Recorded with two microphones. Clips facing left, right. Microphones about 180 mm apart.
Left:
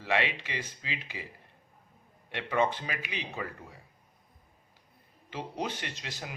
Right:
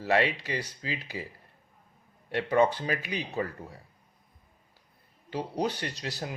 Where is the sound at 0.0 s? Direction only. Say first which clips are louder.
Right 4 dB; 40° right (ahead or behind).